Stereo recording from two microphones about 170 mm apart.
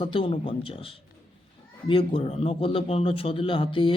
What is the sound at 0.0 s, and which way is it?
Speech, 30° left (ahead or behind).